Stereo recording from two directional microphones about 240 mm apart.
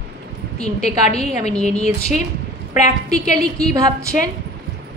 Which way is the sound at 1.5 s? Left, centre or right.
Centre.